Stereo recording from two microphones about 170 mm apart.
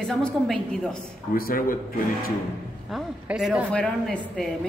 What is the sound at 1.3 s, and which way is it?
Speech, 60° left (ahead or behind).